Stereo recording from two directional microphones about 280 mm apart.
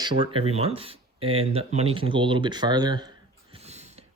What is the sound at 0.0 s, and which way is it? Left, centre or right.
Speech, centre.